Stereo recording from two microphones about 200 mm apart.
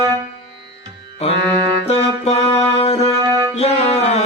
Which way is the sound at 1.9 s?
30° left (ahead or behind).